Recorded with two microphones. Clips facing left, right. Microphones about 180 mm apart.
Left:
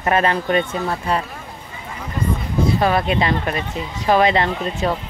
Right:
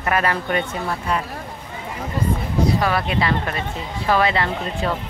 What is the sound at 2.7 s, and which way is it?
Speech, 25° left (ahead or behind).